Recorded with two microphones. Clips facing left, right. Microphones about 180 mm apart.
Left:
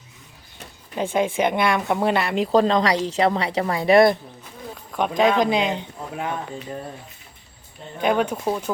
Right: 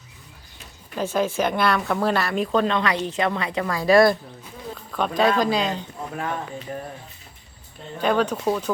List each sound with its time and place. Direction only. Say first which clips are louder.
1.1 s speech: left 2 dB; 15° left (ahead or behind)
8.0 s speech: even; 10° left (ahead or behind)